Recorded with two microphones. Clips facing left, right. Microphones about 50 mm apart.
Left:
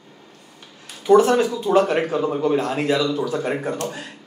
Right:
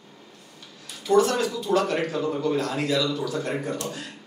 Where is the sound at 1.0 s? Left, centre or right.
Left.